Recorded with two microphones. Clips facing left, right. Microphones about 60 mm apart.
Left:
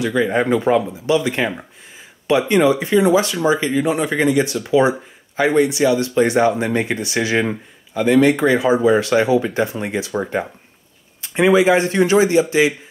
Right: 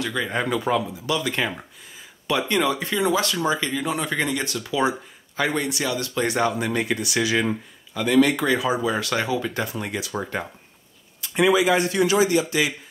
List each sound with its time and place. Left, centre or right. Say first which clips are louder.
0.0 s speech: left 8 dB; centre
11.1 s a man's voice: left 5 dB; left